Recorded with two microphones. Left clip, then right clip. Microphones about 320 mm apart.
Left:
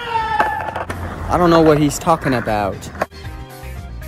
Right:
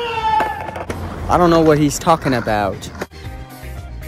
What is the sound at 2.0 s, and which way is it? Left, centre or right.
Speech, centre.